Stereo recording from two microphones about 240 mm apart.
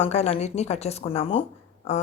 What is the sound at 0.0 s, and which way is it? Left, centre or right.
A woman's voice, left.